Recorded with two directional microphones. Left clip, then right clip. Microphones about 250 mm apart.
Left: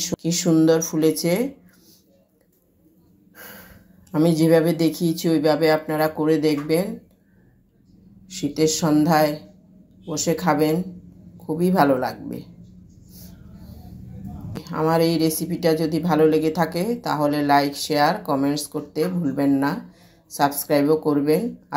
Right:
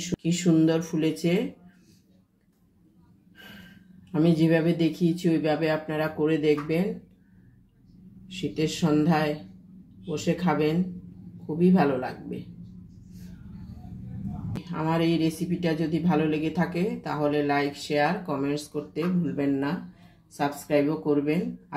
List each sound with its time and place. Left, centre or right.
0.0 s speech: centre
4.1 s speech: centre
8.3 s a woman's voice: centre
14.6 s a woman's voice: centre
20.7 s a woman's voice: centre